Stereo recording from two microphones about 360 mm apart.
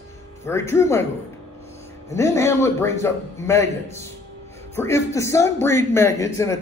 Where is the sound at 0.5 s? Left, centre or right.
Centre.